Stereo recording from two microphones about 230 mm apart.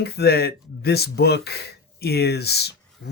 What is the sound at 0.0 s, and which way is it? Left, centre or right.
Speech, left.